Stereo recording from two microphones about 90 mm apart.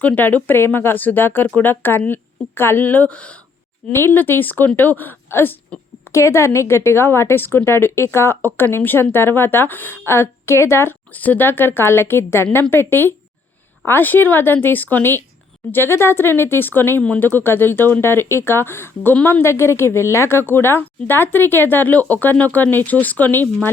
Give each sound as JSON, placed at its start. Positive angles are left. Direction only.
{"t": 0.0, "sound": "a woman's voice", "side_deg": 20}